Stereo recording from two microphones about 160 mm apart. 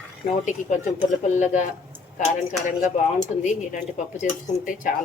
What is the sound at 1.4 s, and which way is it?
Speech, 50° left (ahead or behind).